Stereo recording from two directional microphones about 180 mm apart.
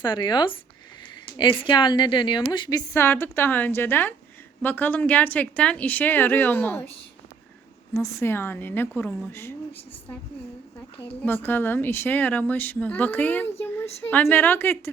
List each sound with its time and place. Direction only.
0.0 s a woman's voice: 25° left (ahead or behind)
7.9 s speech: 15° left (ahead or behind)
11.2 s speech: 10° left (ahead or behind)